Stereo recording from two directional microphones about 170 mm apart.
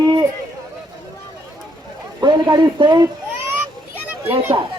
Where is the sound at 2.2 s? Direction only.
25° right (ahead or behind).